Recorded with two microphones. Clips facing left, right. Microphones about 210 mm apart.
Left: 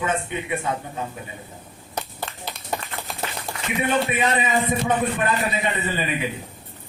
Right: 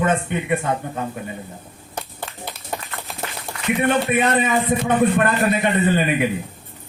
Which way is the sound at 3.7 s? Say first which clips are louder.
Right 3 dB; 55° right (ahead or behind).